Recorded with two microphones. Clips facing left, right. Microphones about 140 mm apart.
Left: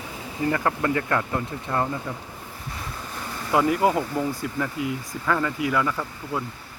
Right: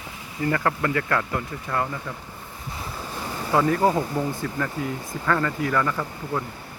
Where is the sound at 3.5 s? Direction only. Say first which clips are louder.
Even; 10° left (ahead or behind).